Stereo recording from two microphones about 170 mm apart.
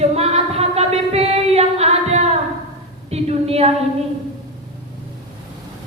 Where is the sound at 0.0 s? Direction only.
40° right (ahead or behind).